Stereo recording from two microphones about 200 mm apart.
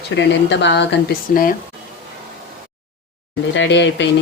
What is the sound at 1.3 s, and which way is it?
Speech, 45° left (ahead or behind).